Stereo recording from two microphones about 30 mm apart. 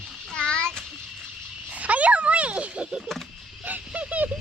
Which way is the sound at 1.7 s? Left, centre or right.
Right.